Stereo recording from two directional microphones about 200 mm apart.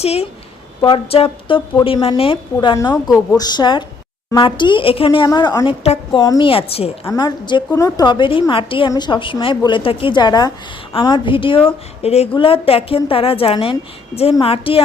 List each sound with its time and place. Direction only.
0.0 s a woman's voice: 30° left (ahead or behind)
5.8 s speech: 30° left (ahead or behind)
6.2 s a woman's voice: 20° left (ahead or behind)
7.0 s a woman's voice: 20° left (ahead or behind)